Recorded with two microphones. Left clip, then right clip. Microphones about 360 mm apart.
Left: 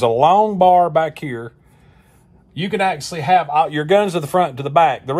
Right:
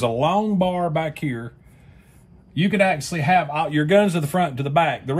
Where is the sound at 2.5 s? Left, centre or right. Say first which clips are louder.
Left 1 dB; centre.